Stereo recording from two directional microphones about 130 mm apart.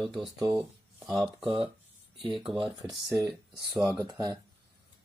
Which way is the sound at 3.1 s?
30° right (ahead or behind).